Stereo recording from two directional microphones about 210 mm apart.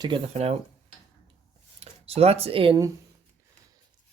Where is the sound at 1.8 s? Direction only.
30° right (ahead or behind).